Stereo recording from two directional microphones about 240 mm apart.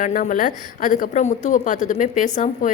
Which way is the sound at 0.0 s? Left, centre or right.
Left.